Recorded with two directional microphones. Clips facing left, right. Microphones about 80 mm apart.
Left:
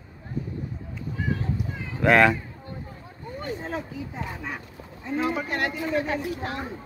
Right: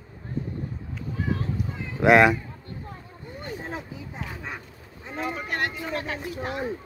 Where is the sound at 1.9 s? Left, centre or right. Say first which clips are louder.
Right 2 dB; centre.